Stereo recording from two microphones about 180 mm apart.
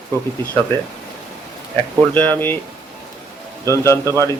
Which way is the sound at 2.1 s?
10° left (ahead or behind).